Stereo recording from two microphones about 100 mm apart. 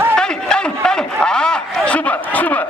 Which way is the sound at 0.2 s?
10° left (ahead or behind).